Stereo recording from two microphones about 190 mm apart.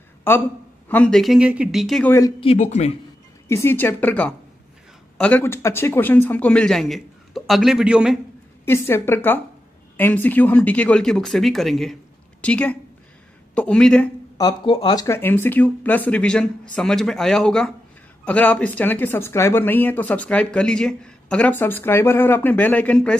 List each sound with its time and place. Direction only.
0.3 s speech: 10° left (ahead or behind)
2.4 s speech: 35° left (ahead or behind)
3.4 s speech: 15° left (ahead or behind); by 8.2 s 5° right (ahead or behind)
8.6 s speech: 15° left (ahead or behind)
14.4 s speech: 20° left (ahead or behind); by 23.1 s 5° left (ahead or behind)